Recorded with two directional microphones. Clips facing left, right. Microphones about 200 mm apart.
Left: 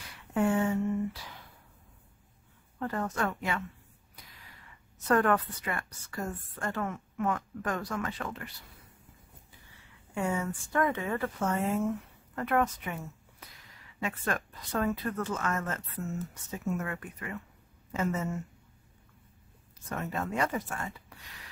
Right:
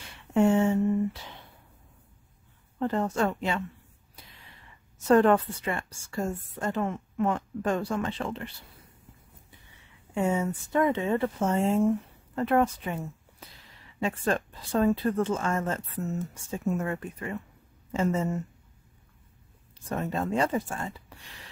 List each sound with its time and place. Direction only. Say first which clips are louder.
0.3 s a sound: right 5 dB; 25° right (ahead or behind)
2.8 s a woman's voice: right 5 dB; 25° right (ahead or behind)
5.0 s a woman's voice: right 6 dB; 25° right (ahead or behind)
10.1 s a woman's voice: right 5 dB; 25° right (ahead or behind)
19.9 s a woman's voice: right 5 dB; 30° right (ahead or behind)